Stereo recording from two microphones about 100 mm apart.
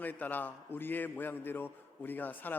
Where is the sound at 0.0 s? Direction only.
15° left (ahead or behind).